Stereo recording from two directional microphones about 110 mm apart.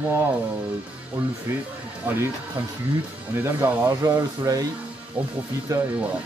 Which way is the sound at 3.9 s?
30° right (ahead or behind).